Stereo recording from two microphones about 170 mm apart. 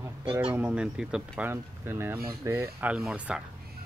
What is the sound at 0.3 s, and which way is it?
Speech, 5° right (ahead or behind).